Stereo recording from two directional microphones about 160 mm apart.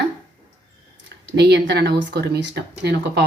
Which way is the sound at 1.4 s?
90° right.